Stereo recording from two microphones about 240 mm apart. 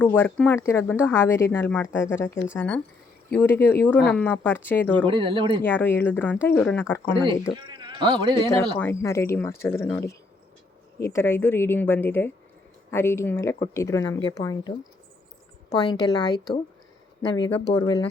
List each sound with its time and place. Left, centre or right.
0.0 s speech: centre
5.0 s speech: right
5.6 s speech: centre
7.5 s speech: centre
8.8 s speech: centre
11.0 s speech: centre
15.7 s speech: centre